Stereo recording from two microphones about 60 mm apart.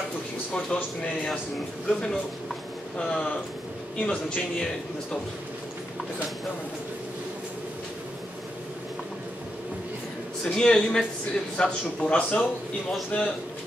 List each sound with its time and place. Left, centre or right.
1.9 s a man's voice: centre
10.4 s a man's voice: centre